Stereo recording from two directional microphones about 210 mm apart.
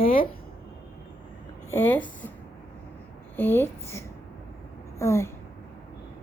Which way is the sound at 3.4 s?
10° left (ahead or behind).